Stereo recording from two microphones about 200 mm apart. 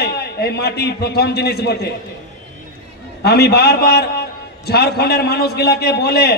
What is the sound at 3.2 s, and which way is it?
A man's voice, 55° left (ahead or behind).